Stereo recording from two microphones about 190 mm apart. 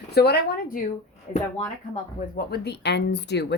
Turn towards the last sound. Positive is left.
turn(degrees=65)  # may be behind; listen again after turning